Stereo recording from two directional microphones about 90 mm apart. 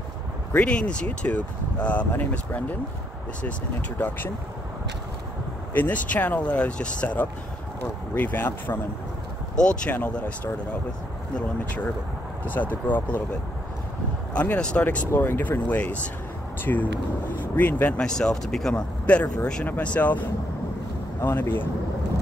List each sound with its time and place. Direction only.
0.5 s speech: 15° left (ahead or behind)
5.7 s speech: 20° left (ahead or behind)
15.0 s speech: 25° left (ahead or behind)
17.9 s speech: 10° left (ahead or behind); by 21.6 s 25° left (ahead or behind)